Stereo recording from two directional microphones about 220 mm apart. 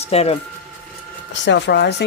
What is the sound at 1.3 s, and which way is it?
Speech, 50° left (ahead or behind).